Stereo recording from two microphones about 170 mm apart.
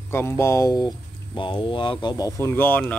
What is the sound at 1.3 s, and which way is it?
Speech, 30° left (ahead or behind).